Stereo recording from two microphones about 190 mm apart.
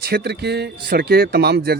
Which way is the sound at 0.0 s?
55° right (ahead or behind).